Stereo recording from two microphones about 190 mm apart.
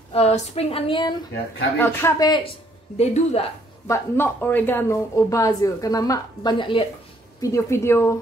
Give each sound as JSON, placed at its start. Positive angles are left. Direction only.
{"t": 0.1, "sound": "speech", "side_deg": 35}
{"t": 1.8, "sound": "speech", "side_deg": 10}
{"t": 3.0, "sound": "speech", "side_deg": 35}
{"t": 3.8, "sound": "speech", "side_deg": 15}
{"t": 7.4, "sound": "speech", "side_deg": 15}